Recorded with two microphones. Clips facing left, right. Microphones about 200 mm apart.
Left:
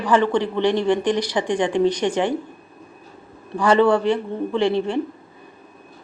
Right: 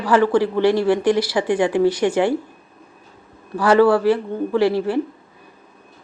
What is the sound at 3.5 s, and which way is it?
A man's voice, 5° right (ahead or behind).